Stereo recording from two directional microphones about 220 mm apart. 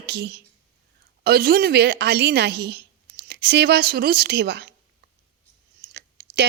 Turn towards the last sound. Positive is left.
turn(degrees=-45)  # may be behind; listen again after turning